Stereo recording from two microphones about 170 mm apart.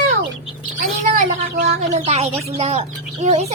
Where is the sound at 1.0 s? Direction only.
55° right (ahead or behind).